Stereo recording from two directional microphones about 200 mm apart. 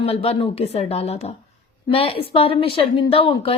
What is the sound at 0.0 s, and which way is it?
A woman's voice, 30° left (ahead or behind).